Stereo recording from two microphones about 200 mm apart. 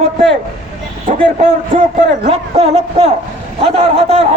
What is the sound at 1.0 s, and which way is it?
A man's voice, 35° right (ahead or behind).